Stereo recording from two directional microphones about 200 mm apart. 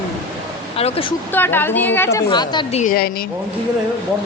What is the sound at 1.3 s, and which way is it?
A woman's voice, 10° left (ahead or behind).